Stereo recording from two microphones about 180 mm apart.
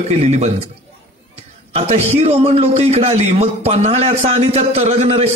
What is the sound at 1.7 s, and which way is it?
A man's voice, 35° right (ahead or behind).